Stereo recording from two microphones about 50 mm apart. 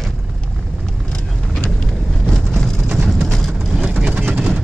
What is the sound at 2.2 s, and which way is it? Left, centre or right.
Vehicle, centre.